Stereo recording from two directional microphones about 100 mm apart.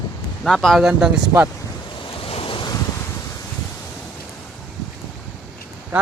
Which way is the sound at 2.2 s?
70° left (ahead or behind).